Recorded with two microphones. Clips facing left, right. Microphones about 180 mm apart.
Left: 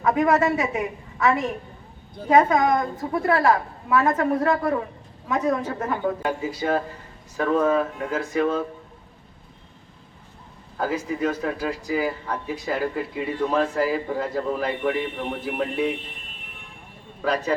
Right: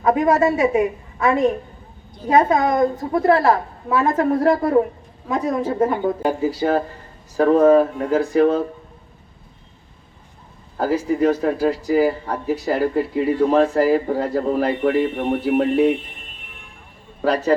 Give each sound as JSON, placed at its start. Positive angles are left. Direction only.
{"t": 0.0, "sound": "speech", "side_deg": -30}
{"t": 2.2, "sound": "a woman's voice", "side_deg": -30}
{"t": 10.8, "sound": "speech", "side_deg": -35}
{"t": 17.2, "sound": "speech", "side_deg": -35}